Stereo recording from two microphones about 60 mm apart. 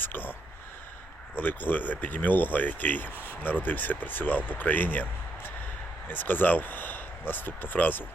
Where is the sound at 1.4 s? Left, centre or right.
Left.